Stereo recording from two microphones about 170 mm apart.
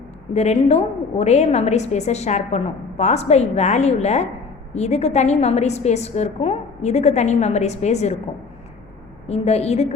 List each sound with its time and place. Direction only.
0.3 s a woman's voice: 40° left (ahead or behind)
9.2 s a woman's voice: 40° left (ahead or behind)